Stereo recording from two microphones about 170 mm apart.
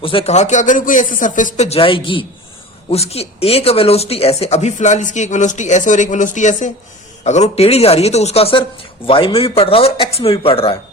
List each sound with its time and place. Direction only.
0.0 s speech: 30° left (ahead or behind)